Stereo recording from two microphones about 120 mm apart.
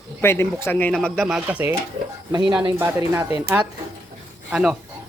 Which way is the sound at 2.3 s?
35° right (ahead or behind).